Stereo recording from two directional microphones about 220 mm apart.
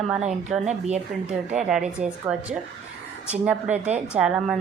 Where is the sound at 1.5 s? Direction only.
Centre (ahead or behind).